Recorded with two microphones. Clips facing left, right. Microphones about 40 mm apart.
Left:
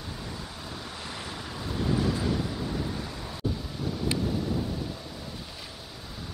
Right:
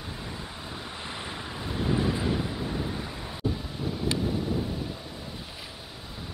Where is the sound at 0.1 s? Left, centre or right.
Centre.